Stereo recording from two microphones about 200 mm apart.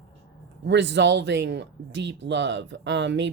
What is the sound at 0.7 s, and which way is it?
Speech, 60° right (ahead or behind).